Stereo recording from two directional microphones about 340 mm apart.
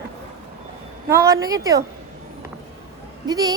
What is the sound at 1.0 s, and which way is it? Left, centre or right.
Speech, centre.